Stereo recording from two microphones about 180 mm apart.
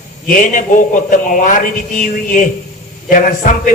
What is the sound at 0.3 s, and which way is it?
A woman's voice, 50° left (ahead or behind).